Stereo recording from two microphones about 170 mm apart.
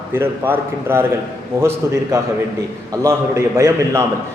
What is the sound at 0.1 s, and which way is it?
A man's voice, 10° right (ahead or behind).